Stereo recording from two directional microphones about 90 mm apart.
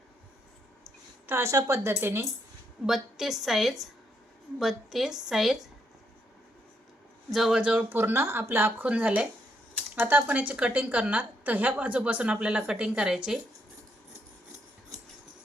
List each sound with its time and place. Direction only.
1.3 s speech: 30° right (ahead or behind)
2.8 s a woman's voice: 5° right (ahead or behind)
7.3 s speech: 5° right (ahead or behind); by 8.9 s 25° right (ahead or behind)
8.9 s a woman's voice: 15° right (ahead or behind)